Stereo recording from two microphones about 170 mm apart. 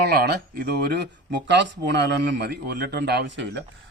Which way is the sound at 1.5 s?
90° right.